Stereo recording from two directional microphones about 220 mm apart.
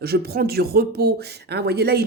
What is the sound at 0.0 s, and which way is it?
Speech, 45° right (ahead or behind).